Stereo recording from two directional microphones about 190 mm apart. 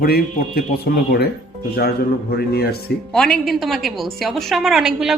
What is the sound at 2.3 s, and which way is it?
Speech, 55° left (ahead or behind).